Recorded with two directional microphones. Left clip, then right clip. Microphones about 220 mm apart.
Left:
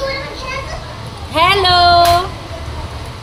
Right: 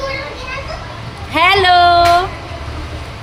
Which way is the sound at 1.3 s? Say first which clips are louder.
Right 1 dB; 35° right (ahead or behind).